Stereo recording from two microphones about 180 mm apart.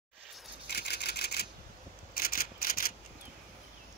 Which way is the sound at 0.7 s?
65° left (ahead or behind).